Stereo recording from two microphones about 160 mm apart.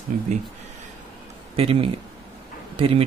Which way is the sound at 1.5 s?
35° right (ahead or behind).